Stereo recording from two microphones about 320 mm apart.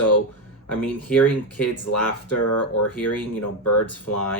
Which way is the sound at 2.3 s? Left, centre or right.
Left.